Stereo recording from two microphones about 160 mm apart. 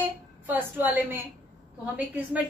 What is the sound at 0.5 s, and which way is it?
A woman's voice, 10° right (ahead or behind).